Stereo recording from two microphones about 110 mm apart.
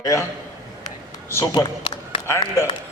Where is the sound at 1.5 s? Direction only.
40° left (ahead or behind).